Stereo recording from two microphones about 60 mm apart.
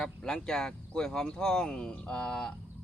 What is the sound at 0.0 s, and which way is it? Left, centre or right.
Speech, centre.